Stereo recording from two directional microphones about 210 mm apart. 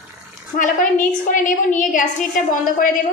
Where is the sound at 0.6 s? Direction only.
40° left (ahead or behind).